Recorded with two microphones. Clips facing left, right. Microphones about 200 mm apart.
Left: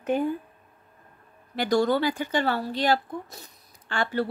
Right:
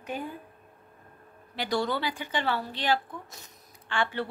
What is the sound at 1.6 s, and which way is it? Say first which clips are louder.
A woman's voice: left 7 dB; 45° left (ahead or behind).